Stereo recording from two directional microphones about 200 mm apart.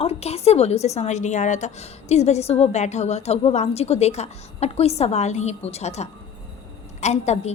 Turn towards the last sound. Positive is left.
turn(degrees=35)  # may be behind; listen again after turning